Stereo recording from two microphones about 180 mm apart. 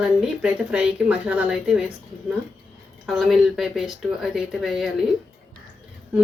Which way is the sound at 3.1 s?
Centre (ahead or behind).